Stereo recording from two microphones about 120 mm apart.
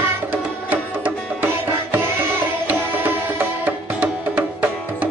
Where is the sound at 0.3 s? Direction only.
15° right (ahead or behind).